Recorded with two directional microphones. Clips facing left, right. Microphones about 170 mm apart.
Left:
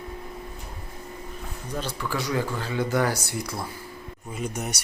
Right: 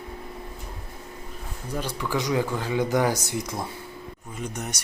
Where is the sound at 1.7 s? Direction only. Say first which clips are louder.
Right 2 dB; 15° right (ahead or behind).